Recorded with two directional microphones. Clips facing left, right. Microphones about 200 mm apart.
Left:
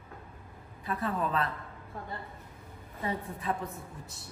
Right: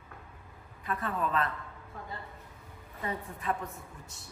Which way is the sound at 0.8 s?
30° left (ahead or behind).